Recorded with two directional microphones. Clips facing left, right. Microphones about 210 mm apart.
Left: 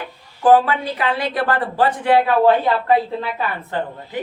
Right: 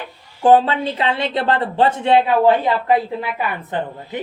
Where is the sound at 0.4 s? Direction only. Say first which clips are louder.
Right 1 dB; 25° right (ahead or behind).